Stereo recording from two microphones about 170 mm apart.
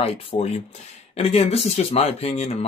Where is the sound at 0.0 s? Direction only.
35° left (ahead or behind).